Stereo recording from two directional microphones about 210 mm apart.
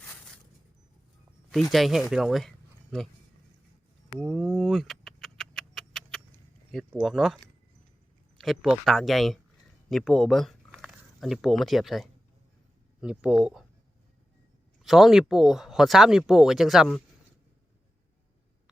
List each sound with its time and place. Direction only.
1.7 s speech: centre (ahead or behind)
4.2 s vehicle: centre (ahead or behind)
6.7 s speech: centre (ahead or behind)
8.4 s speech: centre (ahead or behind)
14.8 s speech: centre (ahead or behind)